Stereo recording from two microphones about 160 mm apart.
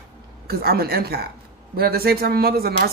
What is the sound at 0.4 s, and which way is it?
Speech, 75° right (ahead or behind).